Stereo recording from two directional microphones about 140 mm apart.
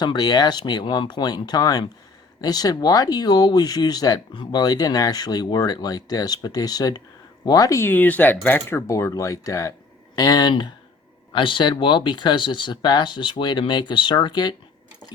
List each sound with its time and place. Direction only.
0.0 s speech: 30° left (ahead or behind)